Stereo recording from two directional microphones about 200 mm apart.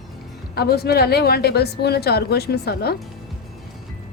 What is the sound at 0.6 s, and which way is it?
A woman's voice, 50° left (ahead or behind).